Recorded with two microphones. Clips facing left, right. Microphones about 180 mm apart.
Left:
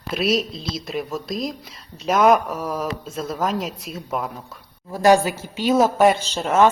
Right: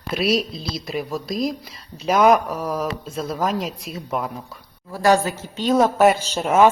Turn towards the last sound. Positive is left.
turn(degrees=-10)  # may be behind; listen again after turning